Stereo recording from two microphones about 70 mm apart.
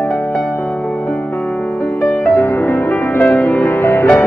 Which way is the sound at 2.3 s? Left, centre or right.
Left.